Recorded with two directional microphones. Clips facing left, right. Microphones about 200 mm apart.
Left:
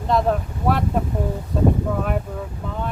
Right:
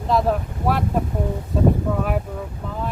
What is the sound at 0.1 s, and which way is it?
Speech, centre (ahead or behind).